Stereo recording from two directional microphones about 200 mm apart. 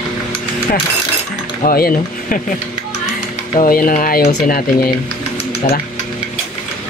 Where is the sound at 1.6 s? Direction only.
45° left (ahead or behind).